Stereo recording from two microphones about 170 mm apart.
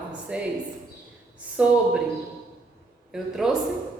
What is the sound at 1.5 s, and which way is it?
Speech, 5° right (ahead or behind).